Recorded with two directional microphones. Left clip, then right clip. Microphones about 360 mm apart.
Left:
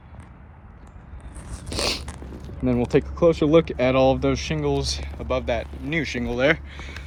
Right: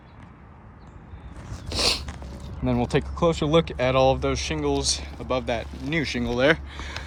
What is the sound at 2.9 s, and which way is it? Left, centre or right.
Speech, centre.